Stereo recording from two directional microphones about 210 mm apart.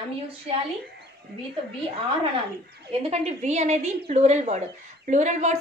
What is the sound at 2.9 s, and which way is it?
A woman's voice, 30° right (ahead or behind).